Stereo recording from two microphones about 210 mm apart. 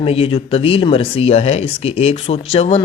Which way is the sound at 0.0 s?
25° left (ahead or behind).